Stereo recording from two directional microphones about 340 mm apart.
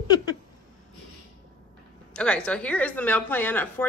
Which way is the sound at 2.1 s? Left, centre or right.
Centre.